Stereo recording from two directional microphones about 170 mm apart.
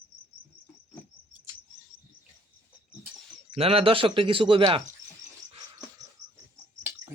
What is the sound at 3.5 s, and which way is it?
Speech, 35° right (ahead or behind).